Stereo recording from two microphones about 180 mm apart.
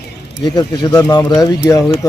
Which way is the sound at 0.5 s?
20° left (ahead or behind).